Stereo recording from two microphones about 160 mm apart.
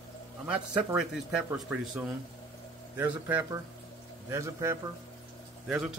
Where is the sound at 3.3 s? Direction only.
20° right (ahead or behind).